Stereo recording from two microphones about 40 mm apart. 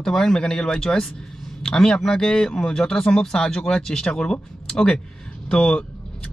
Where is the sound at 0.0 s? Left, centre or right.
Centre.